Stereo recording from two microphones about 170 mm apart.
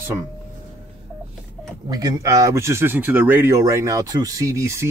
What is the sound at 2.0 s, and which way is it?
Speech, 20° right (ahead or behind).